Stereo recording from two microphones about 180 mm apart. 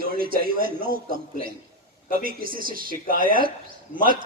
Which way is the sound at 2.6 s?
50° right (ahead or behind).